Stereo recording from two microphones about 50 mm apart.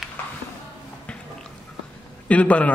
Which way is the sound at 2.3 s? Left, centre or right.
Left.